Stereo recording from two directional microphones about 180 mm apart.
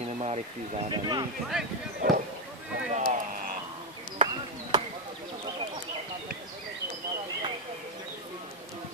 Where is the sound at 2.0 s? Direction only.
45° right (ahead or behind).